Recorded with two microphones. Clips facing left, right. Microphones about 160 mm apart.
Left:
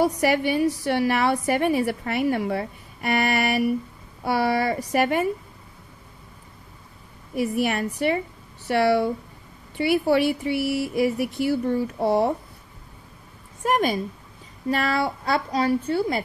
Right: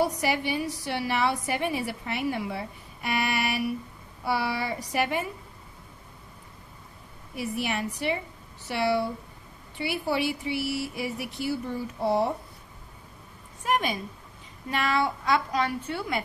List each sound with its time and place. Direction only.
0.2 s a woman's voice: 55° left (ahead or behind)
7.3 s a woman's voice: 50° left (ahead or behind)
13.7 s a woman's voice: 40° left (ahead or behind)